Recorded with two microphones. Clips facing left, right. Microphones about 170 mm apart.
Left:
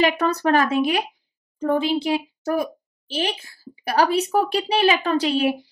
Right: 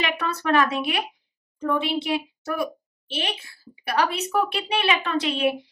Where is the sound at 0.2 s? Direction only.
40° left (ahead or behind).